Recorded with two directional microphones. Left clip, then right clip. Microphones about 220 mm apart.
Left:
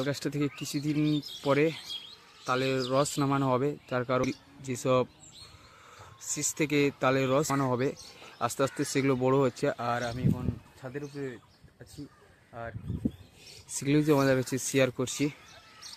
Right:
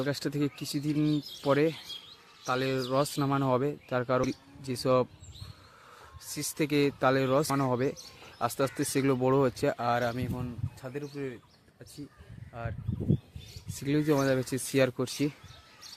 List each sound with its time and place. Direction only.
0.2 s speech: 5° right (ahead or behind)
6.6 s speech: 5° right (ahead or behind)
10.0 s speech: 35° right (ahead or behind)
10.8 s speech: 5° right (ahead or behind)
12.6 s speech: 5° right (ahead or behind)
13.7 s speech: 10° left (ahead or behind)